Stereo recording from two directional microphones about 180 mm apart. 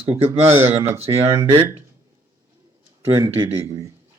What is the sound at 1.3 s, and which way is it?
Speech, 20° right (ahead or behind).